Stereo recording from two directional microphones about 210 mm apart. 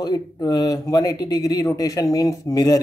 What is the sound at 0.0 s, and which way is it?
Speech, 20° left (ahead or behind).